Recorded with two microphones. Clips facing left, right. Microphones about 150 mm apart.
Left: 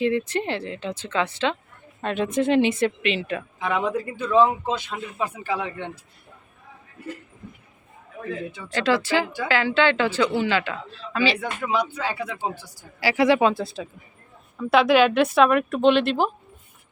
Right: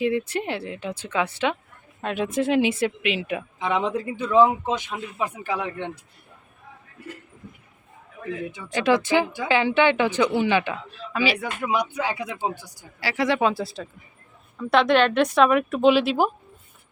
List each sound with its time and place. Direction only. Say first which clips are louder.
0.0 s speech: left 1 dB; 10° right (ahead or behind)
3.6 s speech: even; 20° right (ahead or behind)
8.4 s speech: right 2 dB; 15° right (ahead or behind)
13.0 s speech: left 4 dB; 10° left (ahead or behind); by 16.3 s 5° right (ahead or behind)